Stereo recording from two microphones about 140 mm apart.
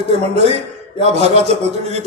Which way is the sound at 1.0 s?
50° right (ahead or behind).